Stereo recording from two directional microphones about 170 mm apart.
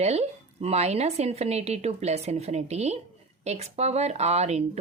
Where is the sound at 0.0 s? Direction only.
40° right (ahead or behind).